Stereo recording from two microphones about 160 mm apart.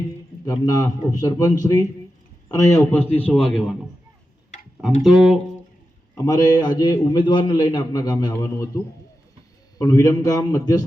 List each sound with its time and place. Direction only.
0.4 s a man's voice: 20° left (ahead or behind); by 3.8 s 5° left (ahead or behind)
5.0 s music: centre (ahead or behind)
6.2 s a man's voice: 25° left (ahead or behind)